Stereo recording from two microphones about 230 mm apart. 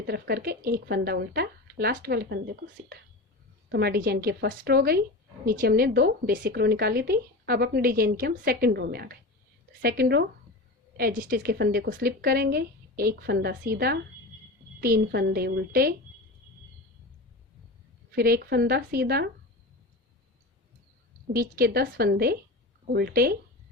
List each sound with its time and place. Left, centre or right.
0.0 s speech: right
3.7 s a woman's voice: right
18.2 s speech: right
21.3 s a woman's voice: right